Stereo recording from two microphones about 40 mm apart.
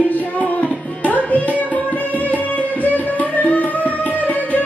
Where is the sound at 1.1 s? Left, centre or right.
Left.